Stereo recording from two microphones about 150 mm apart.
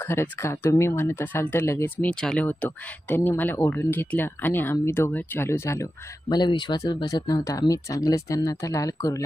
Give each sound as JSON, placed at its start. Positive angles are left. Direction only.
{"t": 0.0, "sound": "speech", "side_deg": 15}
{"t": 2.0, "sound": "speech", "side_deg": 5}
{"t": 6.2, "sound": "speech", "side_deg": 30}